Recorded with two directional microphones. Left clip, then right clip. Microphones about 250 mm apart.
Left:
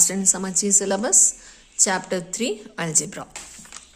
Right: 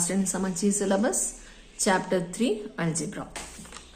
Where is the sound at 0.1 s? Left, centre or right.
Left.